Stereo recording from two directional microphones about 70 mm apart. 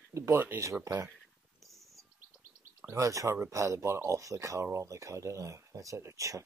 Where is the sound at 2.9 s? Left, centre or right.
Right.